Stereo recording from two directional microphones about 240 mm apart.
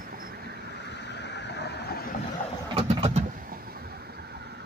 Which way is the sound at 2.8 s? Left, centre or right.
Right.